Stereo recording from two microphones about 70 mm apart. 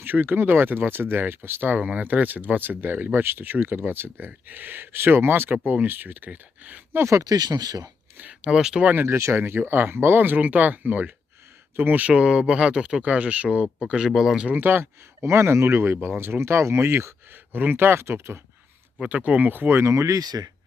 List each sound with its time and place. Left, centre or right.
0.0 s speech: right
6.9 s speech: right
7.2 s speech: right
8.2 s speech: centre
8.9 s speech: right
14.1 s speech: centre
14.4 s speech: right
17.3 s speech: right
18.9 s speech: right